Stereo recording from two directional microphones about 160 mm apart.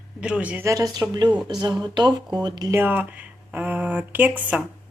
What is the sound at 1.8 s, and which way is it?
Speech, 25° right (ahead or behind).